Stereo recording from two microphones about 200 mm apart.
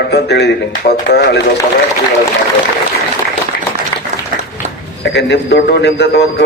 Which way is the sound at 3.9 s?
15° left (ahead or behind).